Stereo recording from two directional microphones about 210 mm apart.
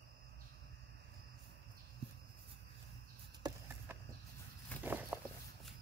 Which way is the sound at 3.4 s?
20° right (ahead or behind).